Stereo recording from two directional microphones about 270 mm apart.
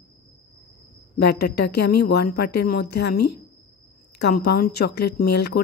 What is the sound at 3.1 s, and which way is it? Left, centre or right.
Speech, left.